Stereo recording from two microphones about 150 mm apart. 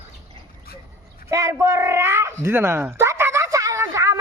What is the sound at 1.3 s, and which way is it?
Speech, 20° right (ahead or behind).